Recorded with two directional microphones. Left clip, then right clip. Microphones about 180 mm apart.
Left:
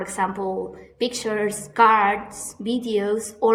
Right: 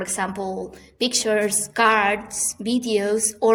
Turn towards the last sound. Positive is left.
turn(degrees=-35)  # may be behind; listen again after turning